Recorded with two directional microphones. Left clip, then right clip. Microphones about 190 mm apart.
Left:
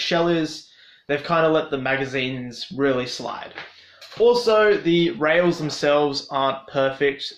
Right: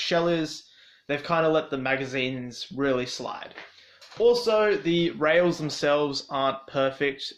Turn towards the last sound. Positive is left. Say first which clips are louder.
# left 5 dB
turn(degrees=-30)  # may be behind; listen again after turning